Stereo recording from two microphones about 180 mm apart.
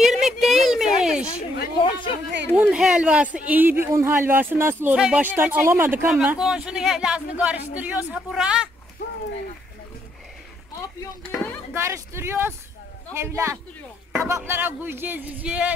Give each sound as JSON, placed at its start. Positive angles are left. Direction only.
{"t": 0.0, "sound": "a sound", "side_deg": 0}
{"t": 1.8, "sound": "speech", "side_deg": 25}
{"t": 2.5, "sound": "speech", "side_deg": -5}
{"t": 11.3, "sound": "speech", "side_deg": 10}
{"t": 11.7, "sound": "speech", "side_deg": -15}